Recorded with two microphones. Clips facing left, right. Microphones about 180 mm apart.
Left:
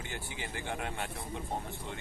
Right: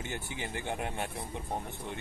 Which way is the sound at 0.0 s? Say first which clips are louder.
Right 3 dB; 20° right (ahead or behind).